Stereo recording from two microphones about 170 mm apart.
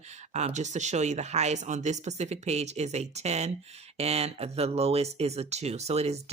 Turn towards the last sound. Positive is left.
turn(degrees=-40)  # may be behind; listen again after turning